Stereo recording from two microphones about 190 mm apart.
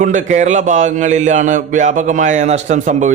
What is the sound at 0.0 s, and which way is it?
A man's voice, 40° right (ahead or behind).